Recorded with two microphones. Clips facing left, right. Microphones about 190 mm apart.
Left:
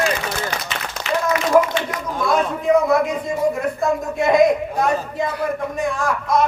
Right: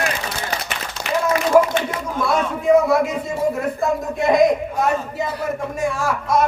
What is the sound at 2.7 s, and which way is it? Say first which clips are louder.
A man's voice: right 1 dB; 10° right (ahead or behind).